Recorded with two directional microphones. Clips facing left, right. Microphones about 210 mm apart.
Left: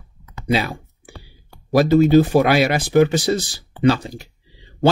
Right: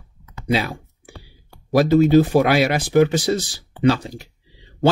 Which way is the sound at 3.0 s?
35° left (ahead or behind).